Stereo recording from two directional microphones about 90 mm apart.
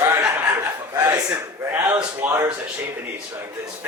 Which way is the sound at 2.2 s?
40° right (ahead or behind).